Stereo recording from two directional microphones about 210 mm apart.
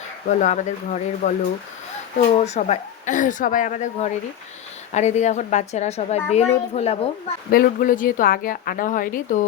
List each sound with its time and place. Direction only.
0.3 s a woman's voice: 35° left (ahead or behind)
2.3 s a woman's voice: 30° left (ahead or behind)
7.5 s a woman's voice: 40° left (ahead or behind)